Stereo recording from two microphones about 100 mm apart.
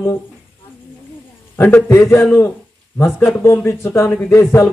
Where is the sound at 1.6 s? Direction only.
20° left (ahead or behind).